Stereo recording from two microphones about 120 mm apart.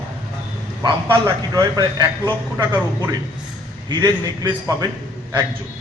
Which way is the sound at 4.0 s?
35° right (ahead or behind).